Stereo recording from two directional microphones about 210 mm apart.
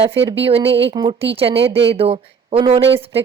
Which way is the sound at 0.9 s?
25° right (ahead or behind).